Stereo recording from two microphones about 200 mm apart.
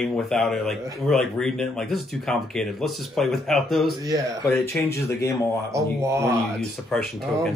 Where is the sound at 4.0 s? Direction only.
15° right (ahead or behind).